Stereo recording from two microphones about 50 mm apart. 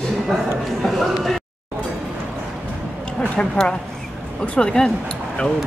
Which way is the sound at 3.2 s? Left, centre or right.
Centre.